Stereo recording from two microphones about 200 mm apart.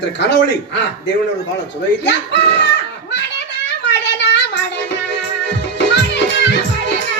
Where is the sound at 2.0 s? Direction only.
60° left (ahead or behind).